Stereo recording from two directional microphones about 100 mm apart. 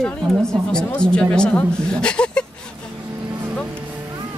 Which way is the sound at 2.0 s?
10° left (ahead or behind).